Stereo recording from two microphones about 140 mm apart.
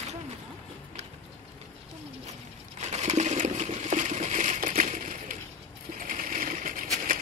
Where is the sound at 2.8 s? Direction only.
55° right (ahead or behind).